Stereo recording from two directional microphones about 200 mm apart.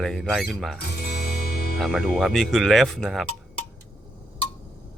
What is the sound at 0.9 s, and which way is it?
Music, 50° left (ahead or behind).